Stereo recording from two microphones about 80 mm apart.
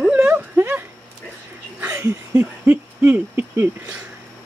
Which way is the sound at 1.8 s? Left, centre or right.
Right.